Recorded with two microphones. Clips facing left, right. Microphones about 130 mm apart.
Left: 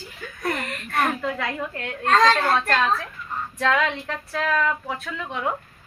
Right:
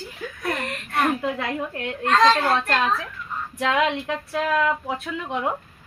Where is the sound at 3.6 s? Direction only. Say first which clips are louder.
Right 1 dB; 15° right (ahead or behind).